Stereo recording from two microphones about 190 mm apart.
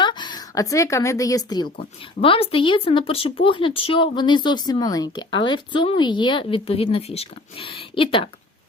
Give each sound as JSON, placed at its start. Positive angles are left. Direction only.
{"t": 0.0, "sound": "a woman's voice", "side_deg": 25}